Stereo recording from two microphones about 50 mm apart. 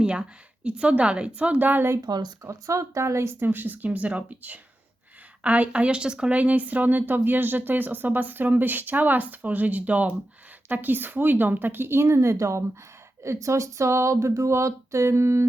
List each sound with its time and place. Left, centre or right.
0.0 s a woman's voice: right
1.4 s speech: right
2.4 s speech: right
3.4 s a woman's voice: right; by 6.3 s centre
6.3 s speech: right
13.2 s speech: right